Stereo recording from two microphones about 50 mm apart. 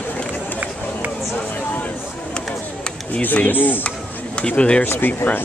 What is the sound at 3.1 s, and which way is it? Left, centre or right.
Speech, left.